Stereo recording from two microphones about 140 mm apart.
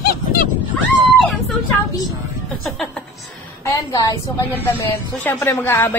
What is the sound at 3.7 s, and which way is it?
Speech, 25° left (ahead or behind).